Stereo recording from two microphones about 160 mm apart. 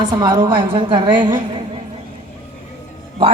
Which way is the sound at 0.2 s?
30° right (ahead or behind).